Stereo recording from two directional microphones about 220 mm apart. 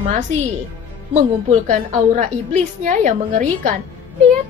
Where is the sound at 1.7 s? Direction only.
35° right (ahead or behind).